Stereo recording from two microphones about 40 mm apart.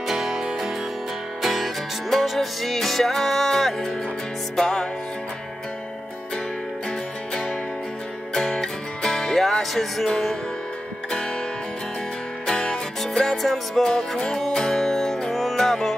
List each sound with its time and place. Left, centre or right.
0.1 s music: centre
1.4 s music: centre
8.4 s music: centre
12.4 s music: centre
13.4 s music: centre
13.8 s music: centre